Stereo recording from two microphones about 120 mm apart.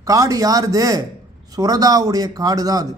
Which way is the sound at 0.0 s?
30° right (ahead or behind).